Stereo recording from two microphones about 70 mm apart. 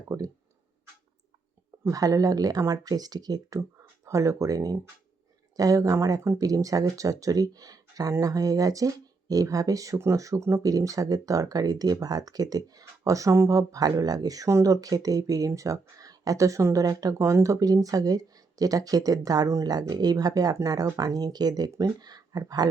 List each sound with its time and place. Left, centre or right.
0.1 s speech: right
1.9 s speech: right
4.0 s speech: right
10.6 s speech: right
17.2 s speech: right
19.9 s speech: right